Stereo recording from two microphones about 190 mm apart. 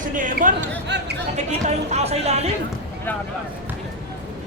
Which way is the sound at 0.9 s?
65° right (ahead or behind).